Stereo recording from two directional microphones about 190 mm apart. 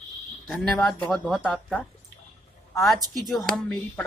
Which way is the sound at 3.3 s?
Centre (ahead or behind).